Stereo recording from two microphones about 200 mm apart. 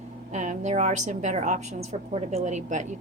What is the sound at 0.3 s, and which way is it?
A woman's voice, 35° right (ahead or behind).